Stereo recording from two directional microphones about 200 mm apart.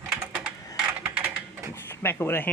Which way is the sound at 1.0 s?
10° right (ahead or behind).